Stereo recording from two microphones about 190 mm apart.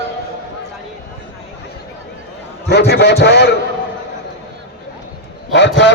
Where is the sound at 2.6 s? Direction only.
60° left (ahead or behind).